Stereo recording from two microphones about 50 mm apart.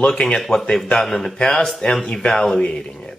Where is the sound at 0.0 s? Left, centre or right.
Centre.